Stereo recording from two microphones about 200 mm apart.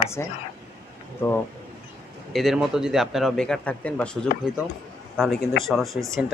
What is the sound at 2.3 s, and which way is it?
A man's voice, centre (ahead or behind).